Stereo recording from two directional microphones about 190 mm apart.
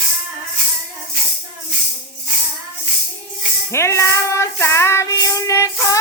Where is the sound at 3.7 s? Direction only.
15° left (ahead or behind).